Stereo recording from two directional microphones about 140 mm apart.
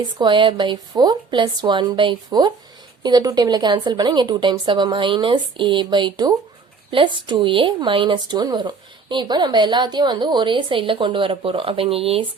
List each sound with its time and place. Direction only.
0.0 s speech: 35° right (ahead or behind)